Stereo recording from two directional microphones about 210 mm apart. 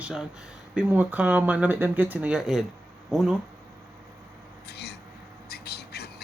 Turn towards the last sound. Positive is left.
turn(degrees=50)  # may be behind; listen again after turning